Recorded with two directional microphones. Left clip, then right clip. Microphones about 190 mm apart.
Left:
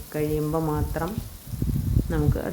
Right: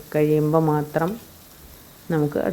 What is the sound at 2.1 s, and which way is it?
Speech, 20° right (ahead or behind).